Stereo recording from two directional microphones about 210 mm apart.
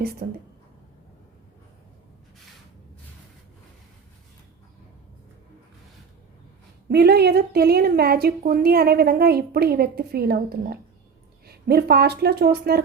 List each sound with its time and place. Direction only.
0.2 s a woman's voice: 40° right (ahead or behind)
6.8 s a woman's voice: 50° right (ahead or behind)